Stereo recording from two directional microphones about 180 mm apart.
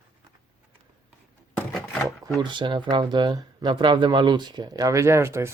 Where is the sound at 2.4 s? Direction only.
25° right (ahead or behind).